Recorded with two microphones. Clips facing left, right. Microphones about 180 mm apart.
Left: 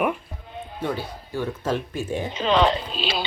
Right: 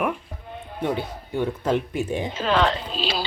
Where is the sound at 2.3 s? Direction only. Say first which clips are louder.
Left 2 dB; 5° right (ahead or behind).